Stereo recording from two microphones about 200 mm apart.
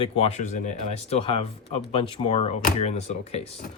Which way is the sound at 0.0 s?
30° left (ahead or behind).